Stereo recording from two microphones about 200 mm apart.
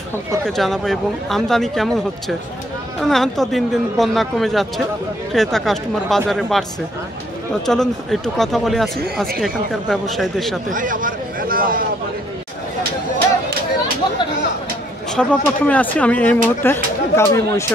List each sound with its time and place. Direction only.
0.5 s a man's voice: centre (ahead or behind)
7.6 s a man's voice: centre (ahead or behind)
10.7 s speech: 40° right (ahead or behind)
15.1 s speech: 5° left (ahead or behind)